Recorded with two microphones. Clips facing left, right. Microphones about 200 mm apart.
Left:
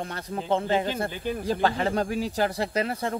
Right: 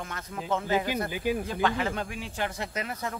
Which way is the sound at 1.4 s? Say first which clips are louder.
Left 3 dB; 35° left (ahead or behind).